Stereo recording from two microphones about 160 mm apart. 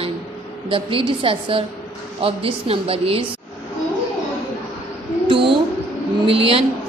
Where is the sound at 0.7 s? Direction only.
35° right (ahead or behind).